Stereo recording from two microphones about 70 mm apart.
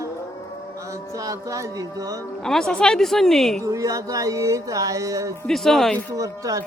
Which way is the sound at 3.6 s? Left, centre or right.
Right.